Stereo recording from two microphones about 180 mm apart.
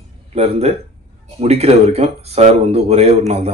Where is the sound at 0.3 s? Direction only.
35° right (ahead or behind).